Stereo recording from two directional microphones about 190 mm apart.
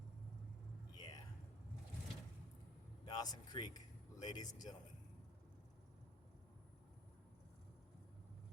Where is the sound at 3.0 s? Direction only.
20° left (ahead or behind).